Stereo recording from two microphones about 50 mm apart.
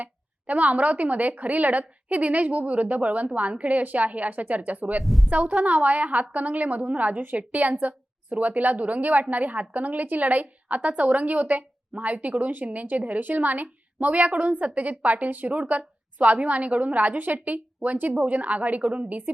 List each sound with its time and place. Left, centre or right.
0.0 s a woman's voice: right
5.0 s a woman's voice: centre
5.3 s a woman's voice: right